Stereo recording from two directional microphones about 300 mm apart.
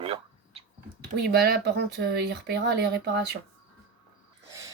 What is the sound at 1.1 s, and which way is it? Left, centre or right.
Speech, right.